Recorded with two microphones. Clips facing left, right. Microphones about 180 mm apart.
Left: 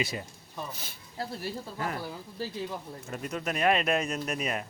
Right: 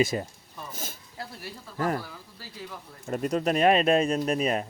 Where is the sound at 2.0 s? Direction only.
25° left (ahead or behind).